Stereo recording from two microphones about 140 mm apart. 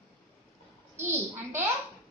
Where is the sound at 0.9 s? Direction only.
15° right (ahead or behind).